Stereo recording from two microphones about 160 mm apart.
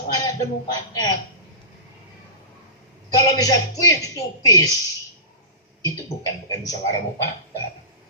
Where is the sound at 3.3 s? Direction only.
20° left (ahead or behind).